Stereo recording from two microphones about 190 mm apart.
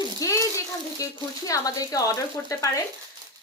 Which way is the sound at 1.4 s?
20° left (ahead or behind).